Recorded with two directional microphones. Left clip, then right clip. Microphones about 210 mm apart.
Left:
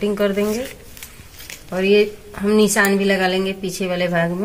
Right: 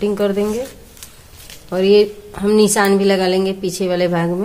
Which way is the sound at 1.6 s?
55° right (ahead or behind).